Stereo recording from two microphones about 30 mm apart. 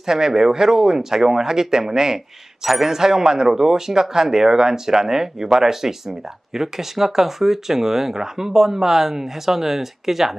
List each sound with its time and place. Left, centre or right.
0.0 s speech: centre